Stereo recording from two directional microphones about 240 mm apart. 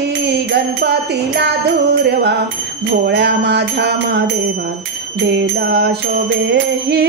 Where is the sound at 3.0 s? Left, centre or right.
Right.